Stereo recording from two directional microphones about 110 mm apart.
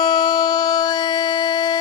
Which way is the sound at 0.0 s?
40° left (ahead or behind).